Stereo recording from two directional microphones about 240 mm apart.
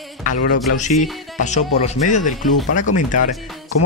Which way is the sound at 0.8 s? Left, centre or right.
Left.